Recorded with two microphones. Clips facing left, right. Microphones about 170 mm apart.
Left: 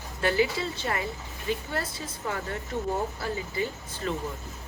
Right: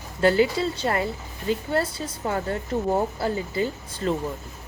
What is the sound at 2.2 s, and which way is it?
Speech, 35° right (ahead or behind).